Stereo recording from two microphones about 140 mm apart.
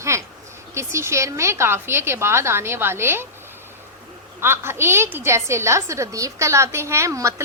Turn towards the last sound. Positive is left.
turn(degrees=-20)  # may be behind; listen again after turning